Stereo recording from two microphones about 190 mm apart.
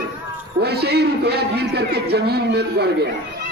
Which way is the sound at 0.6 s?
60° right (ahead or behind).